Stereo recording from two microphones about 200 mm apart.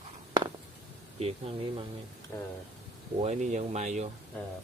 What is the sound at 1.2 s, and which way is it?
Speech, 30° right (ahead or behind).